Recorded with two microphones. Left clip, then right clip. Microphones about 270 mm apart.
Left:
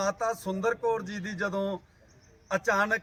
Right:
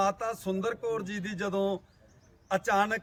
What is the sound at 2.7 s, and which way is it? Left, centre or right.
Speech, centre.